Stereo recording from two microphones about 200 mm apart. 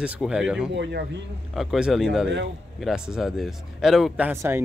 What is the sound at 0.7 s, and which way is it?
Speech, 60° right (ahead or behind).